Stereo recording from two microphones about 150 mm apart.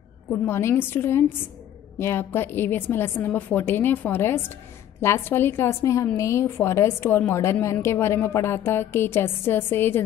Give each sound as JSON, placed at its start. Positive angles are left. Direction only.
{"t": 0.3, "sound": "a woman's voice", "side_deg": 15}